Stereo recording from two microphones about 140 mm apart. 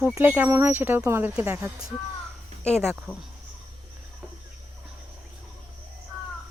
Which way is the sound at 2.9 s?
5° right (ahead or behind).